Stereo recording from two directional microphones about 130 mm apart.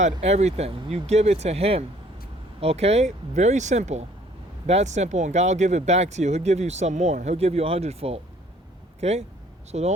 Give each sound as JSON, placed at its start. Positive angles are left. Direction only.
{"t": 0.0, "sound": "speech", "side_deg": -55}